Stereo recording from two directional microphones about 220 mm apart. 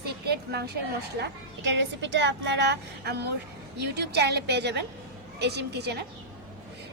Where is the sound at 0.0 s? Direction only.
45° right (ahead or behind).